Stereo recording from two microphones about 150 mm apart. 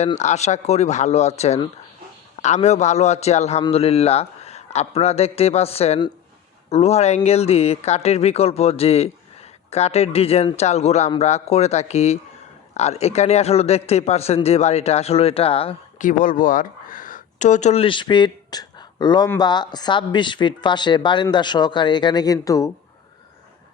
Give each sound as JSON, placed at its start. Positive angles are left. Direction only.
{"t": 0.2, "sound": "speech", "side_deg": 50}
{"t": 16.0, "sound": "speech", "side_deg": 65}